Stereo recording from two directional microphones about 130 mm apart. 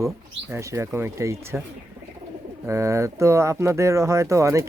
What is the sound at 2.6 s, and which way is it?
Speech, 20° right (ahead or behind).